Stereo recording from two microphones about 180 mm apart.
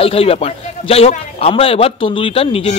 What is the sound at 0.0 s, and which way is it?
A man's voice, 30° left (ahead or behind).